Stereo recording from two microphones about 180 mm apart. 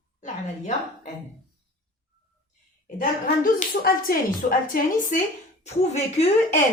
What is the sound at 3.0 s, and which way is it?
Speech, 50° left (ahead or behind).